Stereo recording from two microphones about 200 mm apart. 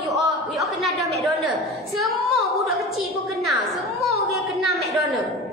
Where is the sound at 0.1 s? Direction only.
Centre (ahead or behind).